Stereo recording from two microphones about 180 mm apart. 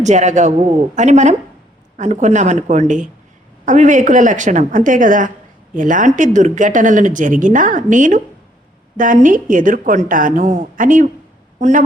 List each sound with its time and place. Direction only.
0.0 s a woman's voice: 40° right (ahead or behind)